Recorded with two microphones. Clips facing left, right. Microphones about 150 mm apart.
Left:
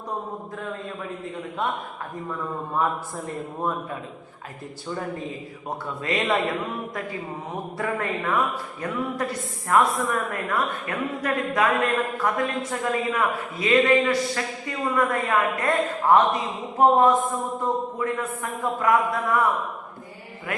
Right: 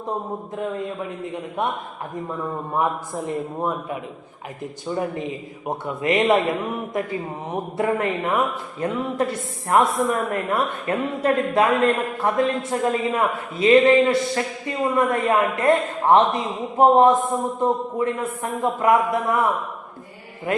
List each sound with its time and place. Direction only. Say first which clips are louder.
2.7 s a man's voice: right 2 dB; 15° right (ahead or behind)
4.9 s speech: right 5 dB; 20° right (ahead or behind)
20.5 s mantra: right 8 dB; 25° right (ahead or behind)